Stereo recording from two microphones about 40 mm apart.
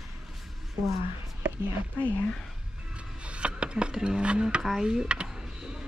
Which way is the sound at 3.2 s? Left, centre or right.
Right.